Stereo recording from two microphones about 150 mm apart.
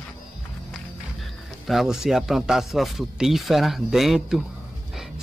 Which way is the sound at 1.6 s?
Centre (ahead or behind).